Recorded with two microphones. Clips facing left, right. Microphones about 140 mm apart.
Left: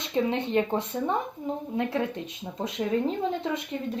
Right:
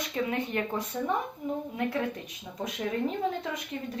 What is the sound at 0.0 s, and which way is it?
Speech, 25° left (ahead or behind).